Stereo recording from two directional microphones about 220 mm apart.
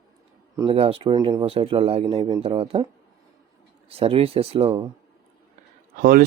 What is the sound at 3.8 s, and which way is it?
Speech, 25° right (ahead or behind).